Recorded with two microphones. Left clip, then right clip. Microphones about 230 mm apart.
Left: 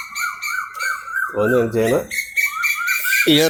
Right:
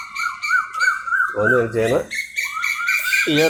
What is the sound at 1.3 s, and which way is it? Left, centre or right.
Speech, left.